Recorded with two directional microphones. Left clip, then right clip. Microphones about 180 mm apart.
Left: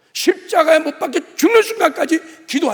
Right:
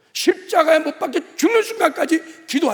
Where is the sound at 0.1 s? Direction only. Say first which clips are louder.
Left 2 dB; 10° left (ahead or behind).